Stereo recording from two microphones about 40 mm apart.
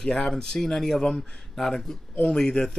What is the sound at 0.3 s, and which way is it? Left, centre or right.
Speech, centre.